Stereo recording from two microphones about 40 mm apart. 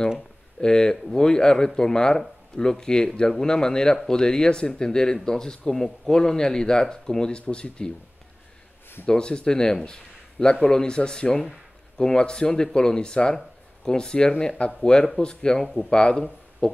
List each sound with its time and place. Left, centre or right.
0.6 s speech: centre
9.0 s speech: left